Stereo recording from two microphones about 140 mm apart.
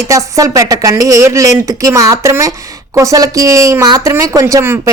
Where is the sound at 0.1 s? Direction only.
20° right (ahead or behind).